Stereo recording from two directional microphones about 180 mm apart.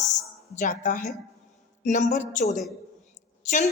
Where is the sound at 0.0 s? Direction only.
40° left (ahead or behind).